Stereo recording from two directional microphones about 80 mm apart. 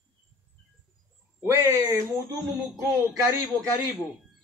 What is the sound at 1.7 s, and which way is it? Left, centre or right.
Speech, right.